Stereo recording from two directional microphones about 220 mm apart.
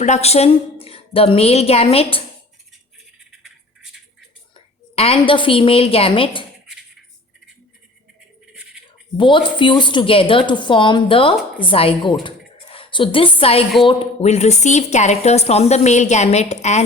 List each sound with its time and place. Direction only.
0.0 s a woman's voice: 30° left (ahead or behind)
4.9 s a woman's voice: 25° left (ahead or behind)
9.1 s a woman's voice: 20° left (ahead or behind)
12.2 s a sound: 25° left (ahead or behind)
13.8 s speech: 25° left (ahead or behind)